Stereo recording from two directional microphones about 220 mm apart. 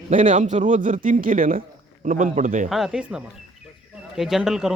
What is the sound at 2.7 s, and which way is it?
Speech, centre (ahead or behind).